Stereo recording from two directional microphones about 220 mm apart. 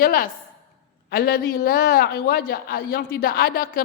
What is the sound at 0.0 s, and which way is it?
A woman's voice, 40° left (ahead or behind).